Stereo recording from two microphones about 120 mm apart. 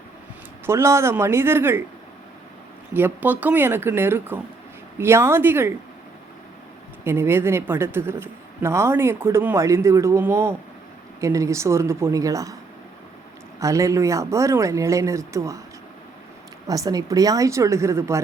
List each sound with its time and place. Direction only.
0.6 s a woman's voice: 20° right (ahead or behind)
2.9 s a woman's voice: 15° right (ahead or behind)
7.0 s a woman's voice: 20° right (ahead or behind)
13.6 s a woman's voice: 25° right (ahead or behind)
16.6 s a woman's voice: 30° right (ahead or behind)